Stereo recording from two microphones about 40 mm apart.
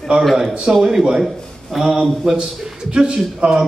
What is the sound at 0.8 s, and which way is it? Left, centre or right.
A man's voice, centre.